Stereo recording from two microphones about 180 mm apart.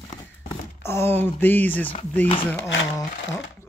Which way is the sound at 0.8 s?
15° left (ahead or behind).